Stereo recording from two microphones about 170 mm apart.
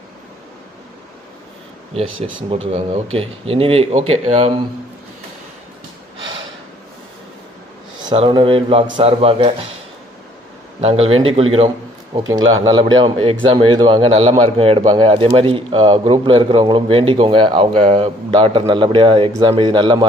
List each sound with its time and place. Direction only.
1.9 s speech: 35° right (ahead or behind)
8.1 s speech: 30° right (ahead or behind)
10.8 s speech: 35° right (ahead or behind)